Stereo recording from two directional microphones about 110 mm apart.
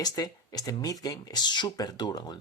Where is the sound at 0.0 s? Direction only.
35° left (ahead or behind).